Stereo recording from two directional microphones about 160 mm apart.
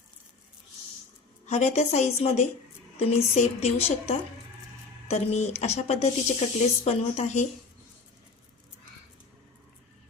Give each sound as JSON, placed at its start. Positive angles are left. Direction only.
{"t": 1.5, "sound": "a woman's voice", "side_deg": 45}